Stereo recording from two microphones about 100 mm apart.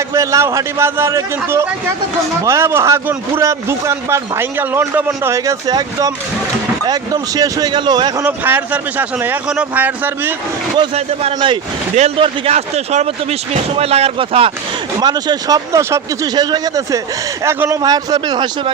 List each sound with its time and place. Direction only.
0.1 s a man's voice: 30° right (ahead or behind)
2.4 s a man's voice: 30° right (ahead or behind)
5.6 s speech: 40° right (ahead or behind)
8.2 s speech: 15° right (ahead or behind)
10.9 s speech: 85° right
11.3 s speech: 55° right (ahead or behind)
11.9 s speech: 80° right
15.0 s speech: 40° right (ahead or behind)
17.4 s speech: 25° right (ahead or behind); by 18.7 s 50° right (ahead or behind)